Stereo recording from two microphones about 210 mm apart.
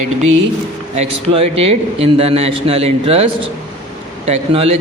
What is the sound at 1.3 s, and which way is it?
A man's voice, 30° right (ahead or behind).